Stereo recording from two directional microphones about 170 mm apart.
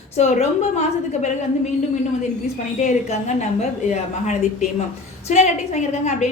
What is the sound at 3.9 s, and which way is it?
A woman's voice, 45° left (ahead or behind).